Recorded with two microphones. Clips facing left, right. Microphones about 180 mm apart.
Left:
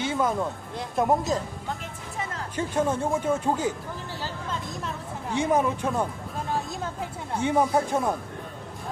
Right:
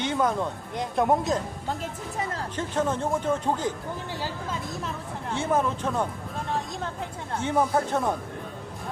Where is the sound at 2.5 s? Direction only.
10° left (ahead or behind).